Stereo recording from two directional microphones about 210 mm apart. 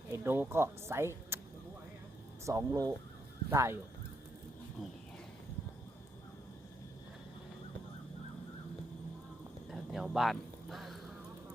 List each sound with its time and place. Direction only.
0.1 s speech: 10° right (ahead or behind)
2.5 s speech: 15° right (ahead or behind)
9.6 s a sound: centre (ahead or behind)